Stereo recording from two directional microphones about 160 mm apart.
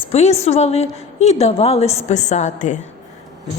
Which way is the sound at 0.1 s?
45° left (ahead or behind).